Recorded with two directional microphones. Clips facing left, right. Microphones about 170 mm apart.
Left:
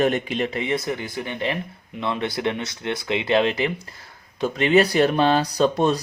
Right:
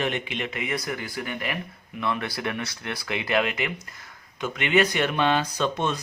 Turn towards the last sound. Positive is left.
turn(degrees=35)  # may be behind; listen again after turning